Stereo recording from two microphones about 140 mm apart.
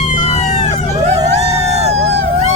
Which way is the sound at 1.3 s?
50° right (ahead or behind).